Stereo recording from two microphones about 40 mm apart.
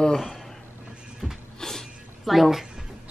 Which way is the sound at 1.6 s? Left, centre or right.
Centre.